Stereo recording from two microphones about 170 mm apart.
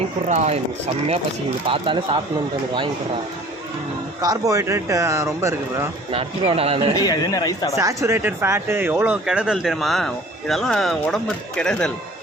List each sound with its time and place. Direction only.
0.3 s speech: 40° right (ahead or behind)
1.6 s speech: 30° right (ahead or behind)
4.2 s speech: 20° right (ahead or behind)
6.1 s speech: 35° right (ahead or behind)
6.9 s speech: 20° left (ahead or behind)
7.8 s speech: 20° right (ahead or behind); by 11.9 s 5° left (ahead or behind)